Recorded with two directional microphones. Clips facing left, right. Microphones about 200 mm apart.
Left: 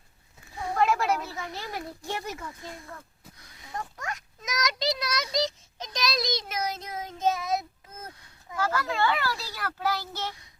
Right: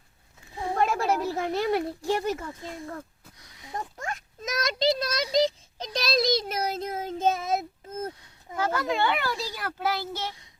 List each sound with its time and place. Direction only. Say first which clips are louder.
0.8 s a sound: left 1 dB; 35° right (ahead or behind)
1.4 s speech: right 11 dB; 60° right (ahead or behind)
2.0 s a child's voice: right 6 dB; 30° right (ahead or behind)
7.1 s child singing: right 1 dB; 30° right (ahead or behind)
7.9 s speech: right 11 dB; 25° right (ahead or behind)